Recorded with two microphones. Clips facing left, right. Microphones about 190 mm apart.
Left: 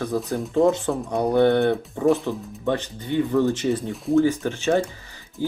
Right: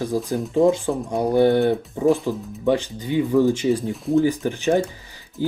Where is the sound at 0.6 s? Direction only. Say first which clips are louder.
Right 3 dB; 15° right (ahead or behind).